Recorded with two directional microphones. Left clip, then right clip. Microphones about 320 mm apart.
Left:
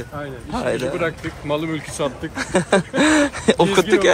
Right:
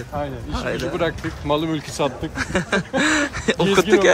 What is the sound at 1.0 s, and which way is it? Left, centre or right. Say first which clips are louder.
Speech: even; right.